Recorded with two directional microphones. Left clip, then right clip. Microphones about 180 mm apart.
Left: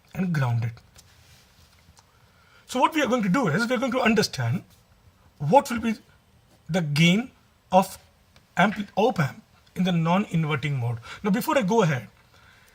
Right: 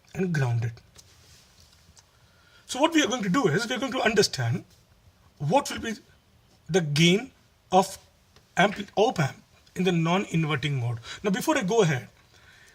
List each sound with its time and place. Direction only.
0.1 s speech: 10° right (ahead or behind)
2.6 s speech: 25° right (ahead or behind)
8.5 s speech: 20° right (ahead or behind)